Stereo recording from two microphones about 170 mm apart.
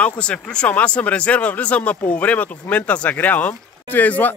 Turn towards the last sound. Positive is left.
turn(degrees=10)  # may be behind; listen again after turning